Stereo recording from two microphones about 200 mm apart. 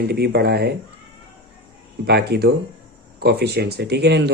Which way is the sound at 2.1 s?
55° right (ahead or behind).